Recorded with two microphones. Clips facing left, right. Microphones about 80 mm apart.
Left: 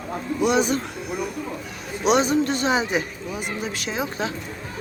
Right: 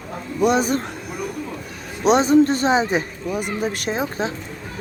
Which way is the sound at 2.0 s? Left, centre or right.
Right.